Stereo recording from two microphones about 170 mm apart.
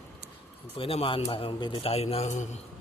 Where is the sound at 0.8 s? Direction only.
35° left (ahead or behind).